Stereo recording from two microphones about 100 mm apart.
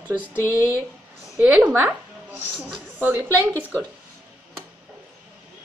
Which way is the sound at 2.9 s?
20° right (ahead or behind).